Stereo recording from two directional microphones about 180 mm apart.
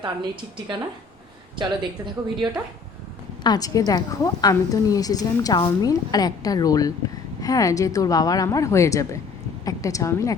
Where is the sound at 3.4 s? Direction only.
20° left (ahead or behind).